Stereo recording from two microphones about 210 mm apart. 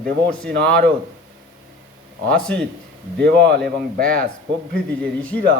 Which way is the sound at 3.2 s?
50° right (ahead or behind).